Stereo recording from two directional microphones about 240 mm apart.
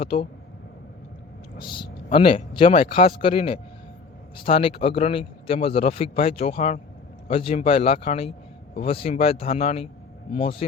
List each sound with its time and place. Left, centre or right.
0.0 s a man's voice: left
1.5 s a man's voice: centre
2.9 s speech: left
3.2 s a man's voice: left